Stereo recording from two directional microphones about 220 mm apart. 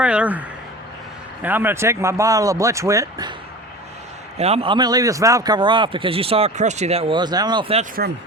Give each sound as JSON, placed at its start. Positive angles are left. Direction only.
{"t": 0.0, "sound": "speech", "side_deg": -5}
{"t": 4.4, "sound": "a man's voice", "side_deg": -30}